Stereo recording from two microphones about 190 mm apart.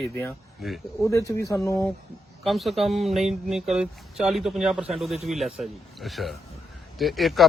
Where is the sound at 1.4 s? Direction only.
15° left (ahead or behind).